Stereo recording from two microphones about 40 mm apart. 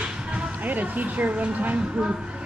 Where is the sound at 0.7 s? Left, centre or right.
Right.